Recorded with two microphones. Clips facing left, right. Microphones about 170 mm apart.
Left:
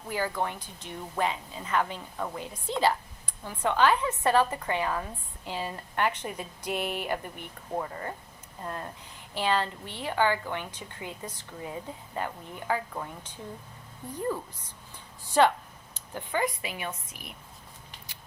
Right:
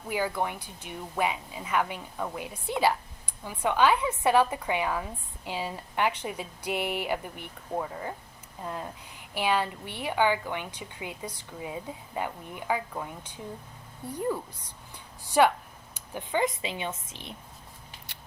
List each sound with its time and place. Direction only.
0.1 s a woman's voice: 10° right (ahead or behind)
14.9 s a sound: 10° right (ahead or behind)
16.0 s speech: 20° right (ahead or behind)